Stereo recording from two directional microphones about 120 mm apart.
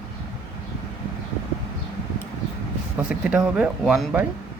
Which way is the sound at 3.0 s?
10° right (ahead or behind).